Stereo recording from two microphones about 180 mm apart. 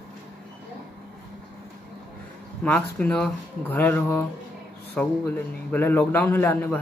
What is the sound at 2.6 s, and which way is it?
Speech, 5° left (ahead or behind).